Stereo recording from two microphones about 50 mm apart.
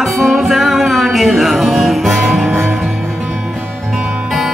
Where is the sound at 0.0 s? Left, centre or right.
Centre.